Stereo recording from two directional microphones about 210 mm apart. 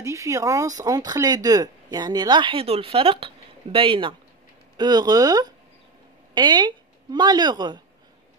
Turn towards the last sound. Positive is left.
turn(degrees=-20)  # may be behind; listen again after turning